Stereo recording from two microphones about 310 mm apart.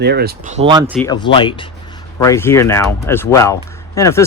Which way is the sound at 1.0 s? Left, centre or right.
Centre.